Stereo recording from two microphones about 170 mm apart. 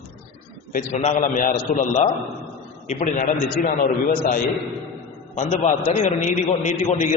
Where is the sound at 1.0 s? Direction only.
50° left (ahead or behind).